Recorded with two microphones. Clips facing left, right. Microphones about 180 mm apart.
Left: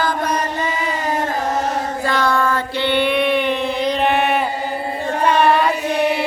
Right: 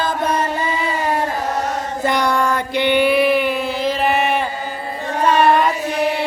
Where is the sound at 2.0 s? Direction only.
20° right (ahead or behind); by 4.4 s centre (ahead or behind).